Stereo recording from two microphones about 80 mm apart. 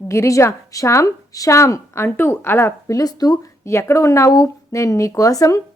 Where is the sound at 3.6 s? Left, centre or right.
Left.